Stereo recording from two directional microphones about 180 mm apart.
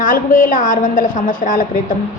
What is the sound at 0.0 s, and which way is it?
A woman's voice, 45° left (ahead or behind).